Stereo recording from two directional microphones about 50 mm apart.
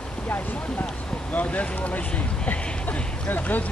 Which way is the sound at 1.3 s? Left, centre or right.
Left.